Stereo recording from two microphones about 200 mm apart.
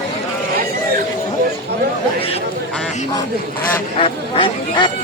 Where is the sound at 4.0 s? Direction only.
25° left (ahead or behind).